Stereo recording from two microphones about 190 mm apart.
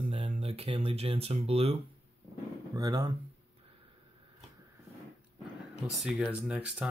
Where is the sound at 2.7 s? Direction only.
20° right (ahead or behind).